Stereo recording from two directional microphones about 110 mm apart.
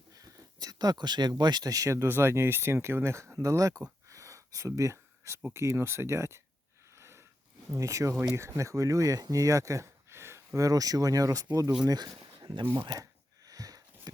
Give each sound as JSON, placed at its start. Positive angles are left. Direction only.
{"t": 0.1, "sound": "speech", "side_deg": -35}
{"t": 4.1, "sound": "a sound", "side_deg": -30}
{"t": 5.5, "sound": "speech", "side_deg": -25}
{"t": 6.9, "sound": "sniff", "side_deg": -25}
{"t": 7.8, "sound": "speech", "side_deg": -30}
{"t": 12.8, "sound": "a sound", "side_deg": -35}